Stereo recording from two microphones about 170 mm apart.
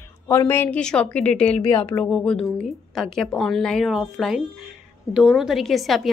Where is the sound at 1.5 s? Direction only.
35° left (ahead or behind).